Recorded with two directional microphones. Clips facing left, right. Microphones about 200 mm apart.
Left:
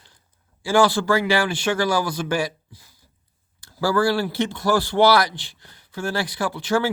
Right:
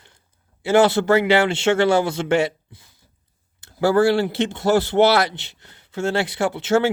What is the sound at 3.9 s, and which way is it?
Speech, 25° right (ahead or behind).